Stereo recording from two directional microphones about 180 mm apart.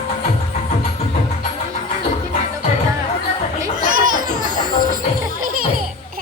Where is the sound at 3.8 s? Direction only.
50° right (ahead or behind).